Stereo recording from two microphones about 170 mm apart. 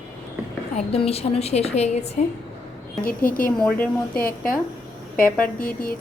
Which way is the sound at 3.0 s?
55° left (ahead or behind).